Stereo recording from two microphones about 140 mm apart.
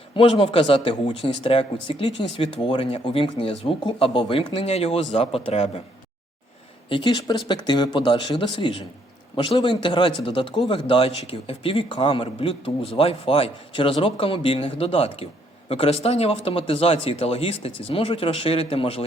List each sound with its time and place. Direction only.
0.2 s a man's voice: 35° left (ahead or behind)
6.8 s a man's voice: 35° left (ahead or behind)